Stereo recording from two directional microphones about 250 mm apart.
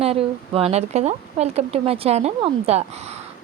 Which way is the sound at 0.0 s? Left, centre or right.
Right.